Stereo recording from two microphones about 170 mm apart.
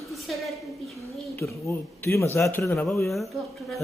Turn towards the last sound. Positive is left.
turn(degrees=0)  # may be behind; listen again after turning